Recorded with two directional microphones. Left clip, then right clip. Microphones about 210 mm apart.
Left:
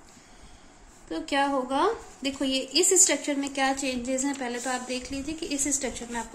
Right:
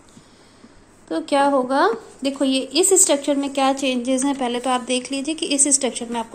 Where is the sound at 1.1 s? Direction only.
20° right (ahead or behind).